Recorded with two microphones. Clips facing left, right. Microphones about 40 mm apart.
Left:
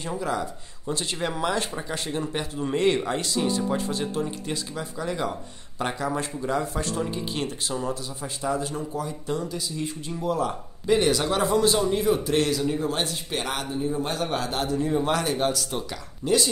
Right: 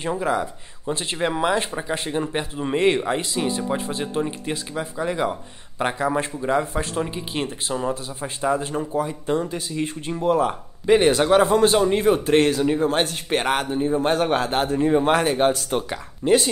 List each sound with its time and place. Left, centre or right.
0.1 s speech: right